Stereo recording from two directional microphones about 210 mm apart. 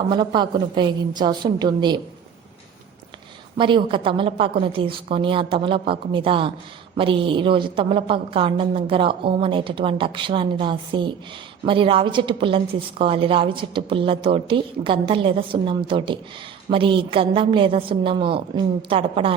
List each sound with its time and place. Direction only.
0.1 s a woman's voice: 20° right (ahead or behind)
3.6 s a woman's voice: 25° right (ahead or behind)